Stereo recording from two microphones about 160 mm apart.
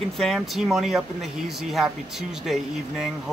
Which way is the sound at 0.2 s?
Centre (ahead or behind).